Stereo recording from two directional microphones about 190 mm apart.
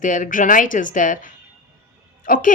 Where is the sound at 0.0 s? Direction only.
45° left (ahead or behind).